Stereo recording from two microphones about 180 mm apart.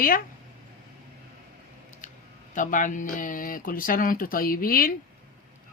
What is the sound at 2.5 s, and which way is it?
Speech, 45° left (ahead or behind).